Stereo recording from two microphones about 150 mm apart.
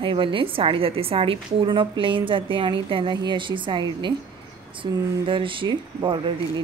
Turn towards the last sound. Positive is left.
turn(degrees=-35)  # may be behind; listen again after turning